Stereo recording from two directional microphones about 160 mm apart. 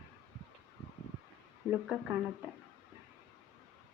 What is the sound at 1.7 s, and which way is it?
Speech, 10° right (ahead or behind).